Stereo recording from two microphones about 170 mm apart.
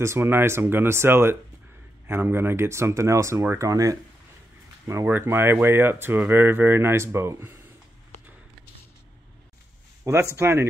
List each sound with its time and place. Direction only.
0.0 s speech: 15° right (ahead or behind)
10.3 s speech: 15° right (ahead or behind)